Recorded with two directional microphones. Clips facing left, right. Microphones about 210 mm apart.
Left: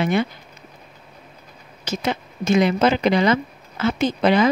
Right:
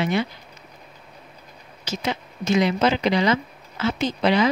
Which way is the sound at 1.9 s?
55° left (ahead or behind).